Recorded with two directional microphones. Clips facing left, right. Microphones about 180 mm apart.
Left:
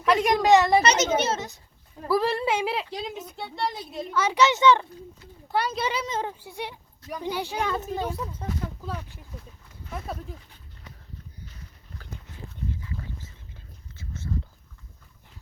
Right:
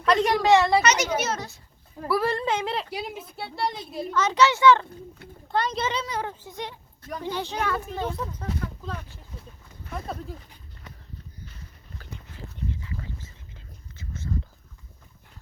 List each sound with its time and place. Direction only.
0.0 s a child's voice: 10° left (ahead or behind)
2.9 s a woman's voice: 10° right (ahead or behind)
4.1 s speech: 10° left (ahead or behind)
5.5 s speech: 5° left (ahead or behind)
6.1 s a child's voice: 20° left (ahead or behind)